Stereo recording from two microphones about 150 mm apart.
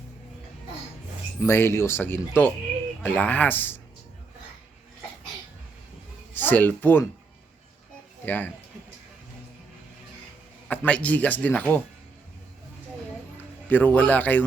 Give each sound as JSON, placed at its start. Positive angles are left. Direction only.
{"t": 1.4, "sound": "speech", "side_deg": 15}
{"t": 6.3, "sound": "speech", "side_deg": 10}
{"t": 8.2, "sound": "speech", "side_deg": 10}
{"t": 10.7, "sound": "speech", "side_deg": 10}
{"t": 13.7, "sound": "speech", "side_deg": 10}